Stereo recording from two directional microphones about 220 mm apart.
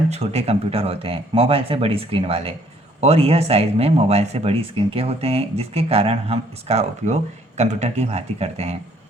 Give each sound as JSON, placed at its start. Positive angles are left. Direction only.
{"t": 0.1, "sound": "speech", "side_deg": -30}